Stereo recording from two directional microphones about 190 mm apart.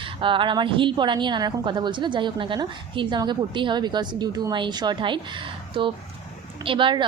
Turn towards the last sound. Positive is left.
turn(degrees=-25)  # may be behind; listen again after turning